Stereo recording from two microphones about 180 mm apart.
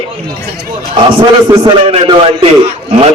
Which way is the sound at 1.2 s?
30° right (ahead or behind).